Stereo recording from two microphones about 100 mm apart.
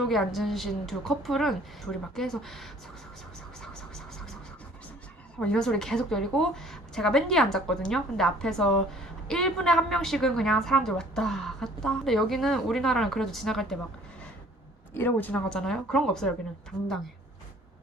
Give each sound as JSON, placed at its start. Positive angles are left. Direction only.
{"t": 0.0, "sound": "a woman's voice", "side_deg": 0}
{"t": 3.6, "sound": "scratch", "side_deg": 5}
{"t": 5.4, "sound": "a woman's voice", "side_deg": 5}
{"t": 14.9, "sound": "speech", "side_deg": 20}
{"t": 15.4, "sound": "a woman's voice", "side_deg": 5}